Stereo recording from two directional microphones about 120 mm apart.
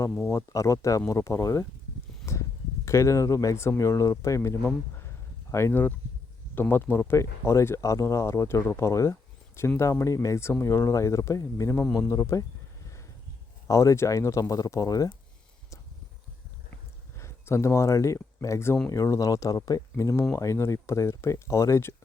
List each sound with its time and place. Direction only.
0.3 s speech: 25° left (ahead or behind)
5.0 s a sound: 20° left (ahead or behind)
6.5 s speech: 15° left (ahead or behind)
13.7 s speech: 25° left (ahead or behind)
17.2 s speech: 25° left (ahead or behind)